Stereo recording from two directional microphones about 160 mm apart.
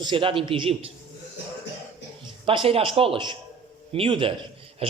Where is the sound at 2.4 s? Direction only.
35° right (ahead or behind).